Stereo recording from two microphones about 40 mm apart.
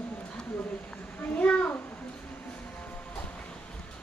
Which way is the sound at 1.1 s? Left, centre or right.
Left.